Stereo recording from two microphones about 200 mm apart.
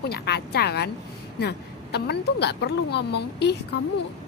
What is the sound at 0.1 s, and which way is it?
Speech, 55° left (ahead or behind).